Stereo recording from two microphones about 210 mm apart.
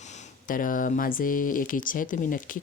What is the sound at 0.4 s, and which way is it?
Speech, 40° left (ahead or behind).